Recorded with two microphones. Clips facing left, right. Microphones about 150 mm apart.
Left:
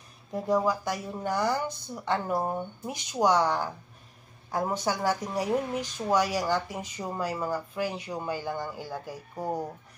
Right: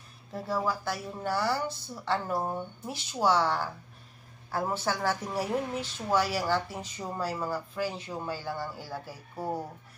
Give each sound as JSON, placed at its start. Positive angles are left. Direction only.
{"t": 0.3, "sound": "speech", "side_deg": 20}